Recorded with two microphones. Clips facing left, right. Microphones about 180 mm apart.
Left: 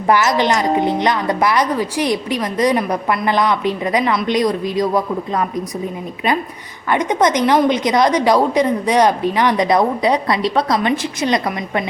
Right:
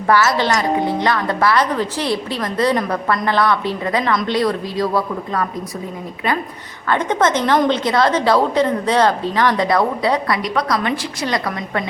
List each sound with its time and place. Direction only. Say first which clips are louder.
0.1 s a woman's voice: left 1 dB; 15° left (ahead or behind)
6.8 s a woman's voice: left 1 dB; 15° left (ahead or behind)